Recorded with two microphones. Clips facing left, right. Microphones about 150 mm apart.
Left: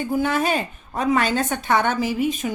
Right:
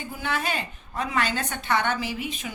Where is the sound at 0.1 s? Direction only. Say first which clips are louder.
Left 8 dB; 45° left (ahead or behind).